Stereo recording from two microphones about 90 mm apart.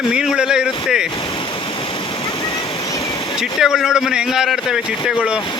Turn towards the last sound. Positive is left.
turn(degrees=-5)  # may be behind; listen again after turning